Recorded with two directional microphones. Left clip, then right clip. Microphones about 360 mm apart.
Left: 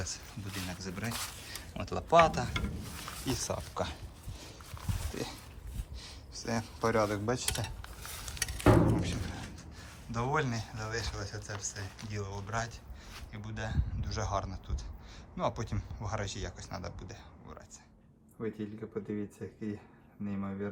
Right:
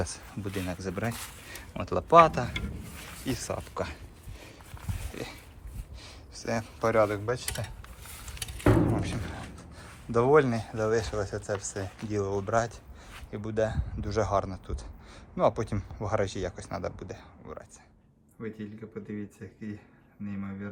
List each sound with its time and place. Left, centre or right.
0.0 s speech: centre
5.1 s speech: centre
6.0 s a sound: centre
7.3 s speech: centre
9.0 s speech: centre